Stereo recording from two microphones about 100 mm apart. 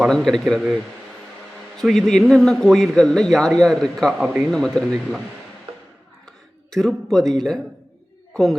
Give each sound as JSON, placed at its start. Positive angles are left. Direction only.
{"t": 0.0, "sound": "speech", "side_deg": 5}
{"t": 6.2, "sound": "a sound", "side_deg": 5}
{"t": 8.3, "sound": "bird", "side_deg": 5}